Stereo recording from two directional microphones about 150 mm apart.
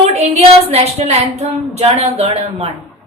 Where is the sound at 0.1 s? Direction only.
45° right (ahead or behind).